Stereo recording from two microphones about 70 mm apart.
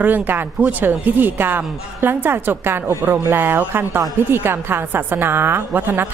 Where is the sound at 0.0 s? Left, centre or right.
Right.